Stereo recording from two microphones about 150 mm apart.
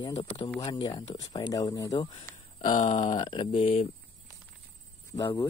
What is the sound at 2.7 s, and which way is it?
Speech, 50° left (ahead or behind).